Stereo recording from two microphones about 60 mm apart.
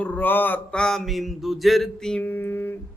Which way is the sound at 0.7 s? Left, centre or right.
Centre.